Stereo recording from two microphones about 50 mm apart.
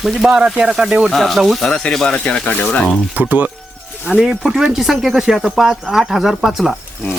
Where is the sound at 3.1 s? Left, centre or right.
Right.